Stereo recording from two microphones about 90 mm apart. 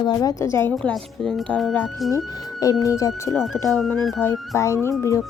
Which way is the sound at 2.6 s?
40° left (ahead or behind).